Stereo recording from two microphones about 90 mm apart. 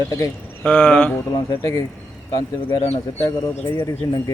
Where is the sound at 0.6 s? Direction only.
10° left (ahead or behind).